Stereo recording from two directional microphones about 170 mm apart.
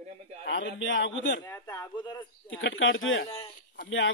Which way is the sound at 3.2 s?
35° left (ahead or behind).